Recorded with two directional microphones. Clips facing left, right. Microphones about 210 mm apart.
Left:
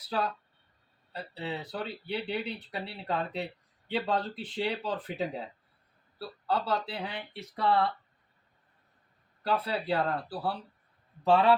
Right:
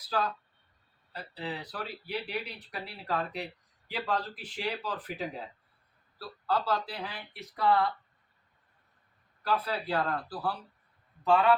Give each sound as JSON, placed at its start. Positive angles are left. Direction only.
{"t": 0.0, "sound": "speech", "side_deg": 25}
{"t": 9.4, "sound": "a man's voice", "side_deg": 25}